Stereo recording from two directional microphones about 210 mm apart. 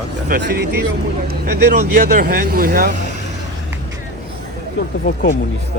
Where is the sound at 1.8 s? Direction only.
45° right (ahead or behind).